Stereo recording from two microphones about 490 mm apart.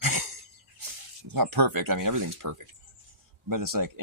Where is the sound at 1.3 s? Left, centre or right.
Right.